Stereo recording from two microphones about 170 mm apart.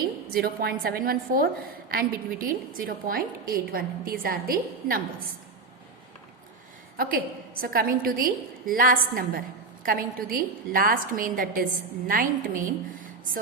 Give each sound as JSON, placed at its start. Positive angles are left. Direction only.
{"t": 0.3, "sound": "a woman's voice", "side_deg": -60}
{"t": 6.9, "sound": "a woman's voice", "side_deg": -60}